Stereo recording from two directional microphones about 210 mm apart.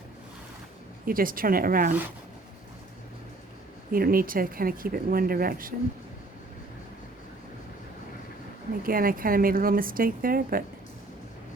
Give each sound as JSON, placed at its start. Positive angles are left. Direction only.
{"t": 1.0, "sound": "speech", "side_deg": -40}
{"t": 3.9, "sound": "speech", "side_deg": -45}
{"t": 8.8, "sound": "speech", "side_deg": -45}